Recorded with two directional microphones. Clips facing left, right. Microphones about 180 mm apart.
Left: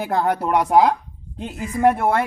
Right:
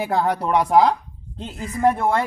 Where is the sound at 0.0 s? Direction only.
Centre (ahead or behind).